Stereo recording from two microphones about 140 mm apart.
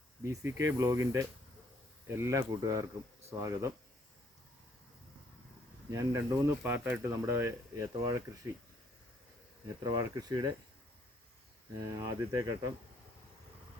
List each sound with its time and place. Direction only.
0.2 s speech: 20° right (ahead or behind)
5.9 s speech: 20° right (ahead or behind)
9.8 s speech: 30° right (ahead or behind)
11.8 s speech: 30° right (ahead or behind)